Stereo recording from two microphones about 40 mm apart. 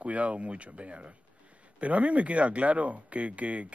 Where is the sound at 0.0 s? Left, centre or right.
Right.